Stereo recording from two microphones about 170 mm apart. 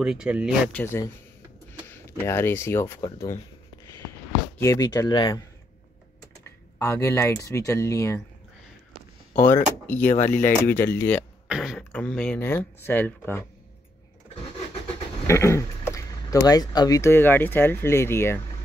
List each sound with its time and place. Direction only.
0.0 s speech: 5° right (ahead or behind)
0.7 s speech: 15° left (ahead or behind)
4.6 s speech: 20° left (ahead or behind)
6.4 s speech: 15° left (ahead or behind)
9.3 s speech: 15° left (ahead or behind)
10.1 s speech: 45° left (ahead or behind)
10.4 s speech: 10° left (ahead or behind)
11.4 s throat clearing: 5° right (ahead or behind)
11.9 s speech: 5° left (ahead or behind)
15.2 s speech: 15° left (ahead or behind)